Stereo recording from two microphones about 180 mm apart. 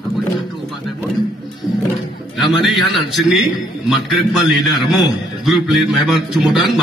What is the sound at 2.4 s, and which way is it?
A man's voice, centre (ahead or behind).